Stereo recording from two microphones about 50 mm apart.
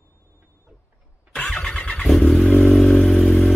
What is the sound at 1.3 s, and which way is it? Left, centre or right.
Vehicle, left.